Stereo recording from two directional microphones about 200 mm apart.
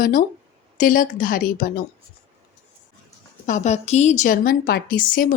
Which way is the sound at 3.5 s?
35° left (ahead or behind).